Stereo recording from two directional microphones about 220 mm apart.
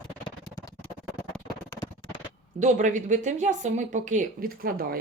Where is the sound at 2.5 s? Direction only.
35° right (ahead or behind).